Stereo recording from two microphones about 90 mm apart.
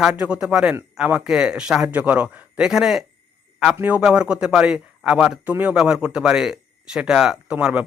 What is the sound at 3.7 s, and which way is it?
Speech, 15° right (ahead or behind).